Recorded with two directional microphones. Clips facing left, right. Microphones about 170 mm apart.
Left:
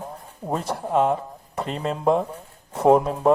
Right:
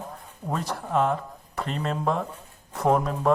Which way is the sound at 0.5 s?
30° left (ahead or behind).